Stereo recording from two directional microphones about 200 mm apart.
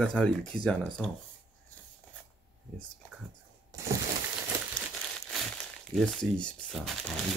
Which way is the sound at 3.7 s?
20° right (ahead or behind).